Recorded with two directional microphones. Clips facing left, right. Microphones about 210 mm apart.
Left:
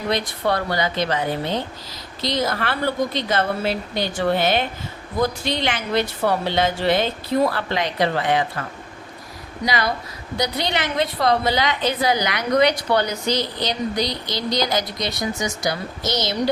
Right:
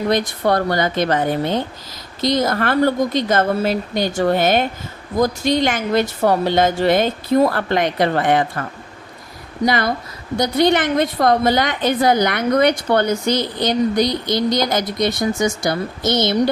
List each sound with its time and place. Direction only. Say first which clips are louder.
0.1 s a woman's voice: right 3 dB; 45° right (ahead or behind)
9.6 s a woman's voice: right 4 dB; 50° right (ahead or behind)